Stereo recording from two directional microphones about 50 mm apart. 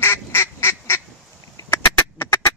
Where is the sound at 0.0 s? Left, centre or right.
Left.